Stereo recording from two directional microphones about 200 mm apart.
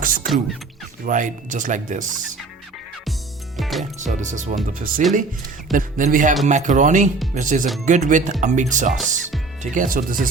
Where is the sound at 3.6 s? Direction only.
Centre (ahead or behind).